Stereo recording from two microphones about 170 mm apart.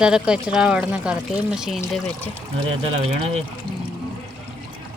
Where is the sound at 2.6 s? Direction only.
35° right (ahead or behind).